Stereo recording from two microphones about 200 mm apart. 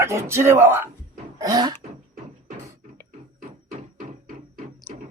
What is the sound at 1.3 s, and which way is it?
Cough, 20° right (ahead or behind).